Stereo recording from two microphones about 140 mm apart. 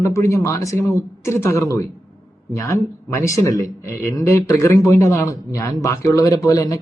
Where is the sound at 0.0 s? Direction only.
20° left (ahead or behind).